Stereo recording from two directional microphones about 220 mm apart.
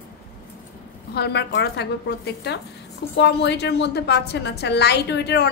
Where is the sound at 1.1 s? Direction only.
50° left (ahead or behind).